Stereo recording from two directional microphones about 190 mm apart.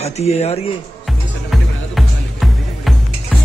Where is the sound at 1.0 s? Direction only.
Centre (ahead or behind).